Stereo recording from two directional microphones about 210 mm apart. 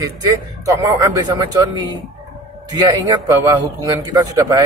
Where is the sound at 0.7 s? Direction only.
15° right (ahead or behind).